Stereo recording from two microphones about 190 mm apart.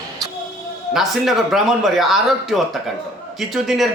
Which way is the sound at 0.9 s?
Centre (ahead or behind).